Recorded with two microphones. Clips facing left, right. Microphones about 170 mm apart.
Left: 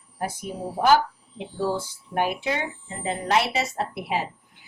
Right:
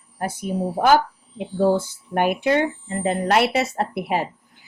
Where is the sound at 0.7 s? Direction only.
55° right (ahead or behind).